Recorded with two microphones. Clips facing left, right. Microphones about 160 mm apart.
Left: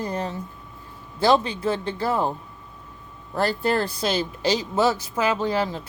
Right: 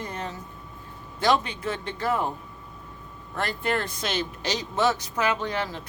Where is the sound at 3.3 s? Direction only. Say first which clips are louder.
Left 5 dB; 35° left (ahead or behind).